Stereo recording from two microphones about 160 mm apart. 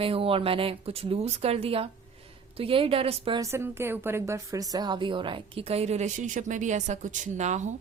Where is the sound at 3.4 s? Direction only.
15° right (ahead or behind); by 7.7 s 50° right (ahead or behind).